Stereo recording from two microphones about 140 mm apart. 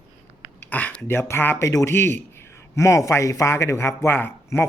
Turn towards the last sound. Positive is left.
turn(degrees=15)  # may be behind; listen again after turning